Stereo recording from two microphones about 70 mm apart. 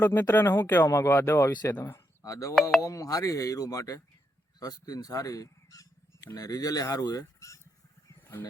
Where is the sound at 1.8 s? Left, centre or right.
Left.